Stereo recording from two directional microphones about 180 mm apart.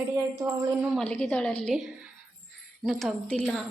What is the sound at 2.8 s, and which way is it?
Speech, centre (ahead or behind).